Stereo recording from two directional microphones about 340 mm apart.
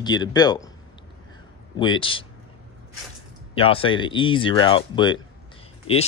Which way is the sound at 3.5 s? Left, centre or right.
Centre.